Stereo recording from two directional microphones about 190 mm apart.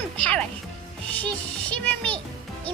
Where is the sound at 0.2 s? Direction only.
5° left (ahead or behind).